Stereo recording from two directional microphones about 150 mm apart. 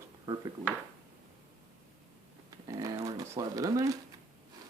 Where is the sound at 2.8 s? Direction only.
20° right (ahead or behind).